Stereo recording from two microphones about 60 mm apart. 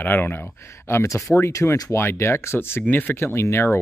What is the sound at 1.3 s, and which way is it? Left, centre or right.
Speech, left.